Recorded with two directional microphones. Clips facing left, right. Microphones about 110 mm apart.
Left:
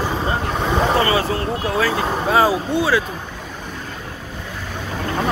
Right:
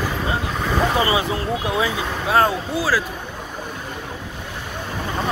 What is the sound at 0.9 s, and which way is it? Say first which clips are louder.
Speech: left 2 dB; 20° right (ahead or behind).